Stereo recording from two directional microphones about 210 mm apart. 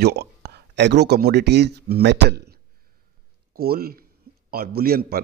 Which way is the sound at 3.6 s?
45° right (ahead or behind).